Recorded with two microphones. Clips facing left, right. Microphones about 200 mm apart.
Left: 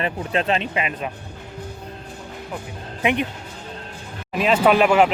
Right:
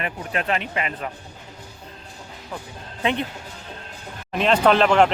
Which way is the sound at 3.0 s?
15° left (ahead or behind).